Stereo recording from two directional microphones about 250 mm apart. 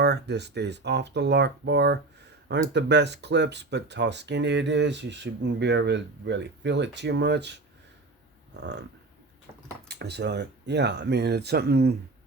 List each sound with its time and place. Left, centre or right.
0.0 s speech: right
9.9 s speech: right